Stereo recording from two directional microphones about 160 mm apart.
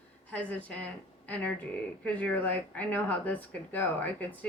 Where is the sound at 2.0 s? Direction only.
10° left (ahead or behind).